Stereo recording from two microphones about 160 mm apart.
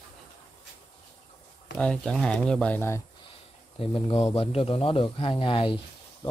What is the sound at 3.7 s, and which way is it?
A man's voice, 35° left (ahead or behind).